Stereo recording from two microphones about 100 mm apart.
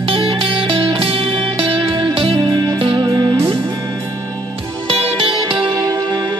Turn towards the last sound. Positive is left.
turn(degrees=-65)  # may be behind; listen again after turning